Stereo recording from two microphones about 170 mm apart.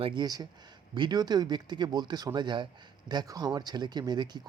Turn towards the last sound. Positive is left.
turn(degrees=-25)  # may be behind; listen again after turning